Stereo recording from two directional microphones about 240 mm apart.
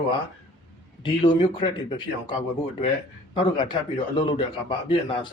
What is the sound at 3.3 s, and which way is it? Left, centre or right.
A man's voice, centre.